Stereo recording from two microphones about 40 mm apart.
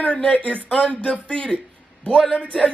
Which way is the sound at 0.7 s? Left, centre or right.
Left.